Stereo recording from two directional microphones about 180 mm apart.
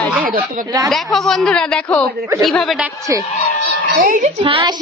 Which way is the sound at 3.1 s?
15° right (ahead or behind).